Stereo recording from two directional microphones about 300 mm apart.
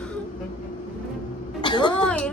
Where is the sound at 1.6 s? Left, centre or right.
Centre.